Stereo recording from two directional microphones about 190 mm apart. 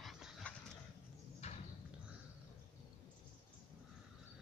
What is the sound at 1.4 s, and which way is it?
Horse, 35° left (ahead or behind).